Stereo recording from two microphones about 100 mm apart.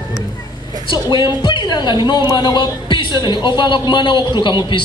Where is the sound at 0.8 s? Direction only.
55° left (ahead or behind).